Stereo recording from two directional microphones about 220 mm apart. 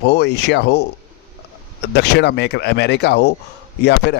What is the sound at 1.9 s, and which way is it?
A man's voice, 50° left (ahead or behind).